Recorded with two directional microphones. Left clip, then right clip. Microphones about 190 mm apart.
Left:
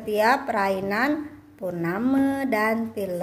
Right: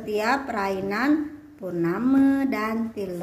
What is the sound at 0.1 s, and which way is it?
A woman's voice, 30° left (ahead or behind).